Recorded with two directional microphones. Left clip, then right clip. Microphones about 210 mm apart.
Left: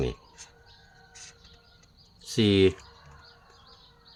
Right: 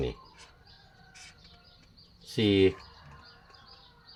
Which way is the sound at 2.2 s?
35° left (ahead or behind).